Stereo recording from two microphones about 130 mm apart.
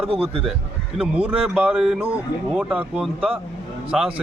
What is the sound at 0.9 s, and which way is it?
Speech, 10° right (ahead or behind).